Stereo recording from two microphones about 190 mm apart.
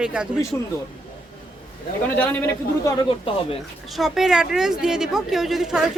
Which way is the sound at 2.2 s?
10° left (ahead or behind).